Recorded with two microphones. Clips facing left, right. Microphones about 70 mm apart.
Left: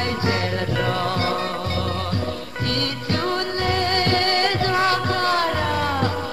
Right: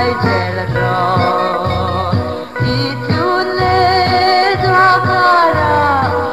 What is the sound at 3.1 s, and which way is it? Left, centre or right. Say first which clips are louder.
Music: right 10 dB; right.